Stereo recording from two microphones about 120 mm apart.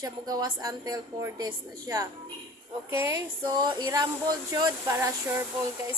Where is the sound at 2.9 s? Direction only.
20° right (ahead or behind).